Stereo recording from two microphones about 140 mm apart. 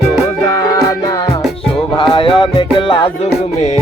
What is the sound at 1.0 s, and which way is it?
Music, 30° left (ahead or behind).